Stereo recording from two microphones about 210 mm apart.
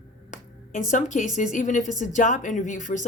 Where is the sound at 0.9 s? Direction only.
35° left (ahead or behind).